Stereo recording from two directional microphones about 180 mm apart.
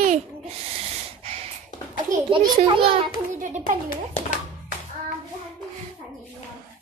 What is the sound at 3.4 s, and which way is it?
Speech, 45° right (ahead or behind).